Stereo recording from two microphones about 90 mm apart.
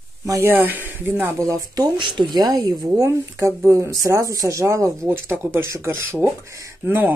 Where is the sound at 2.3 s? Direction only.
45° right (ahead or behind); by 6.3 s 25° right (ahead or behind).